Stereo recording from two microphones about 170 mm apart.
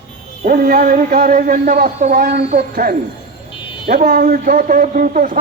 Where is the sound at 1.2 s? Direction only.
40° right (ahead or behind).